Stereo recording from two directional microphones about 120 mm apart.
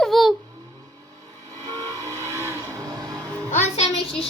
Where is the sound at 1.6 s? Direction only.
30° right (ahead or behind).